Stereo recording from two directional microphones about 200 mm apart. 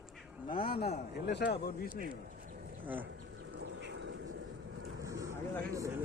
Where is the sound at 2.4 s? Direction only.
45° right (ahead or behind).